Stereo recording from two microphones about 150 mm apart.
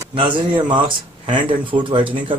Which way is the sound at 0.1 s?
35° right (ahead or behind).